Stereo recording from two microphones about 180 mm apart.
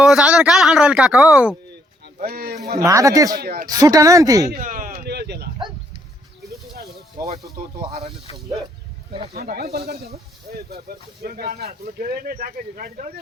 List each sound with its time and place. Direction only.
0.0 s speech: 5° right (ahead or behind)
2.1 s speech: 55° right (ahead or behind)
2.8 s speech: 20° right (ahead or behind)
3.4 s speech: 55° right (ahead or behind)
3.7 s speech: 20° right (ahead or behind)
4.5 s speech: 50° right (ahead or behind); by 5.5 s 65° right (ahead or behind)
7.9 s speech: 35° right (ahead or behind)
9.3 s speech: 60° right (ahead or behind)